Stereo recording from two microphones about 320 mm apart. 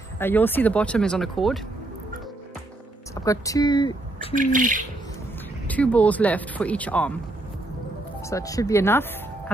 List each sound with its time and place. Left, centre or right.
0.2 s speech: centre
3.3 s speech: centre
4.4 s speech: right
5.7 s speech: centre
8.2 s speech: centre